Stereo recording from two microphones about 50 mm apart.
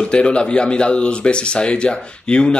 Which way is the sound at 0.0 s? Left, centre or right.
Centre.